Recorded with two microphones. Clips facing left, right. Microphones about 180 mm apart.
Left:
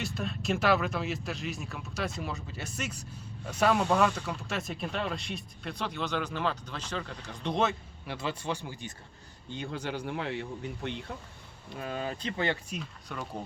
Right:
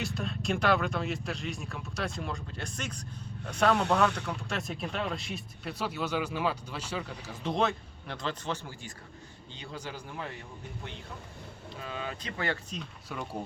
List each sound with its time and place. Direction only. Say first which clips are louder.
0.0 s speech: even; centre (ahead or behind)
9.5 s a man's voice: left 6 dB; 55° left (ahead or behind); by 10.4 s 70° left (ahead or behind)
11.8 s speech: left 4 dB; 45° left (ahead or behind)
12.2 s speech: left 3 dB; 20° left (ahead or behind)
12.7 s speech: even; centre (ahead or behind)